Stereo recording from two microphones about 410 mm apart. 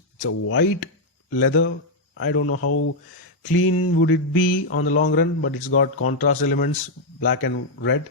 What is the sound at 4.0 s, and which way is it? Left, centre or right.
Mantra, left.